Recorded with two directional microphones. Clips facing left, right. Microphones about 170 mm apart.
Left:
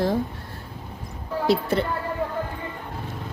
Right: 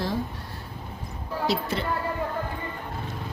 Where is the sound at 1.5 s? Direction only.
55° left (ahead or behind).